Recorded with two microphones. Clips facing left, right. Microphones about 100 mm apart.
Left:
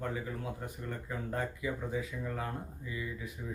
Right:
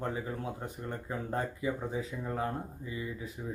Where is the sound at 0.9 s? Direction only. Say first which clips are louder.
Right 2 dB; 30° right (ahead or behind).